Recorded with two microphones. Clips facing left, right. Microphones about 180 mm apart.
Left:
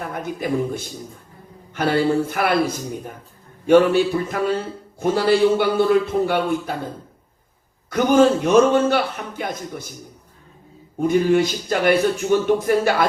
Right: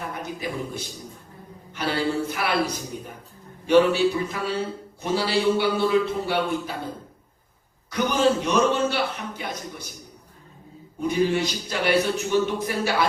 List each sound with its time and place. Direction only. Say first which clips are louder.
0.1 s a man's voice: left 7 dB; 50° left (ahead or behind)
7.9 s a man's voice: left 6 dB; 50° left (ahead or behind)
11.0 s a man's voice: left 6 dB; 50° left (ahead or behind)